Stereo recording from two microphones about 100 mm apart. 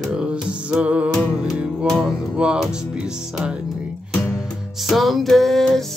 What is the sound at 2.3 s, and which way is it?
Music, 10° right (ahead or behind).